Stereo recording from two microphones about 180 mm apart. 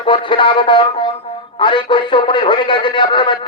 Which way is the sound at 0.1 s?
25° left (ahead or behind).